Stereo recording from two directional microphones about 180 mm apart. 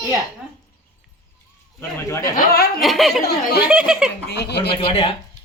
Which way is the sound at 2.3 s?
60° left (ahead or behind).